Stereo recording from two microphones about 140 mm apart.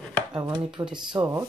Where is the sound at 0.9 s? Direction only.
35° right (ahead or behind).